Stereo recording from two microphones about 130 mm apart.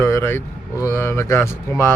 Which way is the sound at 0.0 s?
20° left (ahead or behind).